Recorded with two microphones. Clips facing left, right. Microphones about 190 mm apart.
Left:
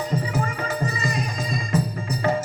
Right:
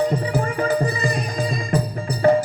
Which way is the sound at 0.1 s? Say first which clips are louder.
Right 3 dB; 35° right (ahead or behind).